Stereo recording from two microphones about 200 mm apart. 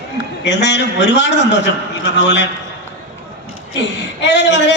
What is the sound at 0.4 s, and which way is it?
Speech, 60° left (ahead or behind).